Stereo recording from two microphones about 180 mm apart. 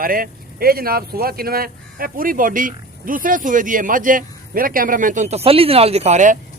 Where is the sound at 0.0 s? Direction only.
55° right (ahead or behind).